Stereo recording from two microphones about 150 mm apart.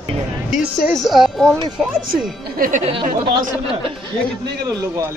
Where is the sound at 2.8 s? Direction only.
35° right (ahead or behind).